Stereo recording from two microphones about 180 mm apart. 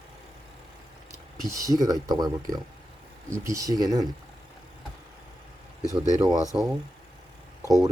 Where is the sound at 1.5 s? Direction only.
20° right (ahead or behind).